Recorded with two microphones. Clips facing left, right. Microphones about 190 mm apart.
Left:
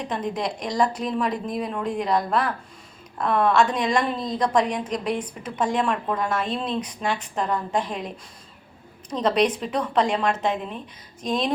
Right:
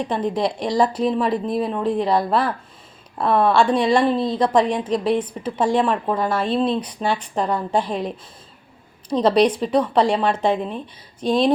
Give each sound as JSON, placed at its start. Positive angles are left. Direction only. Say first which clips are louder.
{"t": 0.1, "sound": "a woman's voice", "louder": "right 4 dB", "side_deg": -30}